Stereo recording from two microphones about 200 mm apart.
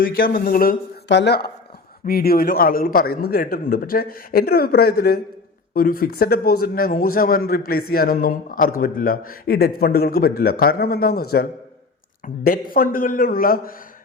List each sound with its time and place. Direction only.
0.0 s a man's voice: 45° left (ahead or behind)
1.0 s a man's voice: 60° left (ahead or behind)